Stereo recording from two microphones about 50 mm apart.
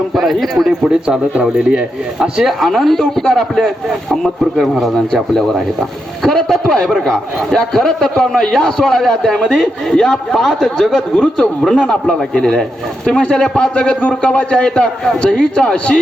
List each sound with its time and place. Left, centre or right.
0.1 s a man's voice: centre
1.4 s speech: right
2.4 s a man's voice: centre
4.5 s a man's voice: centre
6.2 s a man's voice: centre